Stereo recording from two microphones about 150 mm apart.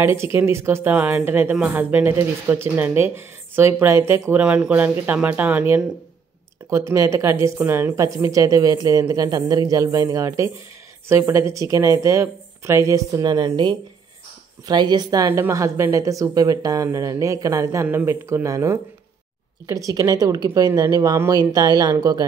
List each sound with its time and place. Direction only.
0.0 s speech: 15° right (ahead or behind)
6.9 s a woman's voice: 20° right (ahead or behind)